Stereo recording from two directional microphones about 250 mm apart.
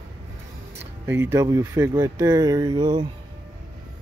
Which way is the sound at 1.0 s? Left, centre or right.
Centre.